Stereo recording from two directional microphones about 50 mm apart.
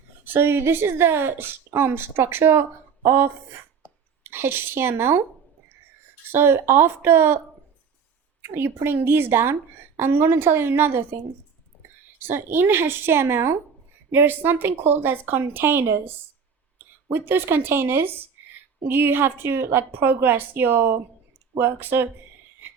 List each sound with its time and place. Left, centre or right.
0.3 s speech: right
6.3 s speech: right
8.5 s a woman's voice: right
14.1 s speech: right